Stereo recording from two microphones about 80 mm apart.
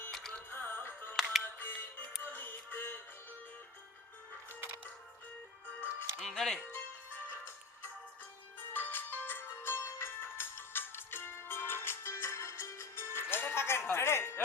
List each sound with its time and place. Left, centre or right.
0.1 s music: centre
0.5 s music: left
1.1 s music: centre
1.5 s music: left
5.6 s music: left
6.1 s speech: centre
6.6 s speech: left
8.7 s music: left